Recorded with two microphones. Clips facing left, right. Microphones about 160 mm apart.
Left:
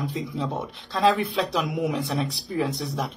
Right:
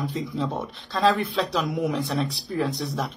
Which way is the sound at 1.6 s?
20° left (ahead or behind).